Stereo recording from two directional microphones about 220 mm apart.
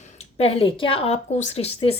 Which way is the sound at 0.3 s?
25° left (ahead or behind).